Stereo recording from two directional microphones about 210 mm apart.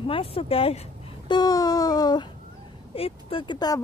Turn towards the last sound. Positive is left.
turn(degrees=20)  # may be behind; listen again after turning